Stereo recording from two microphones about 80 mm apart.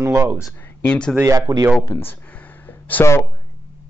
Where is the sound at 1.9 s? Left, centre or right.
Left.